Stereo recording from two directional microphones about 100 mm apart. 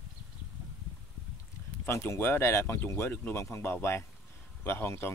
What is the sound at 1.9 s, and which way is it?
Speech, 25° left (ahead or behind).